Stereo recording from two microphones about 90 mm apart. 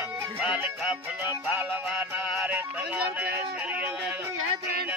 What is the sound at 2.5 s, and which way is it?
Music, 20° right (ahead or behind).